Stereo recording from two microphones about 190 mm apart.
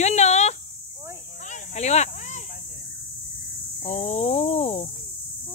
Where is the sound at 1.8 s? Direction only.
35° left (ahead or behind).